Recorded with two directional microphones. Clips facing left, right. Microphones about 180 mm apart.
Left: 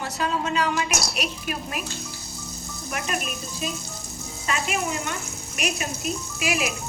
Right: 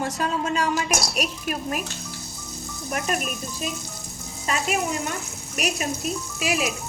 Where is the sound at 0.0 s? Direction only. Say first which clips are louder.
Right 1 dB; 45° right (ahead or behind).